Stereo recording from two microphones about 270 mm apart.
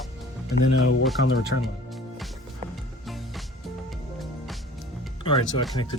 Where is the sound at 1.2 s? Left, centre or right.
Left.